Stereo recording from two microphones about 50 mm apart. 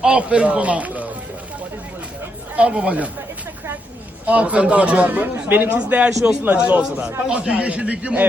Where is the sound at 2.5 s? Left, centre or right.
Right.